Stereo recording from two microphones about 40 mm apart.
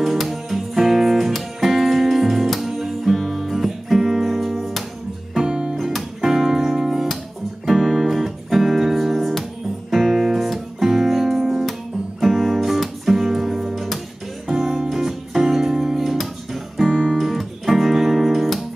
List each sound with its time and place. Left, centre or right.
0.0 s music: centre
3.4 s music: centre
5.4 s music: centre
7.6 s music: centre